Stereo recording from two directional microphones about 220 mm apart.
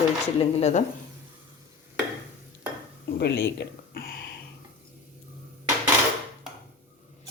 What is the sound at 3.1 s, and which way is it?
Speech, 45° left (ahead or behind).